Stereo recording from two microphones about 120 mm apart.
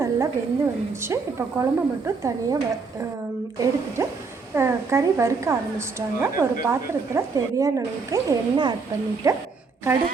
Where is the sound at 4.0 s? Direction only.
25° right (ahead or behind).